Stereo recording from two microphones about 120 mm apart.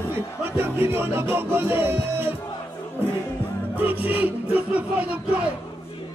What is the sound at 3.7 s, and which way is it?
Speech, 15° right (ahead or behind).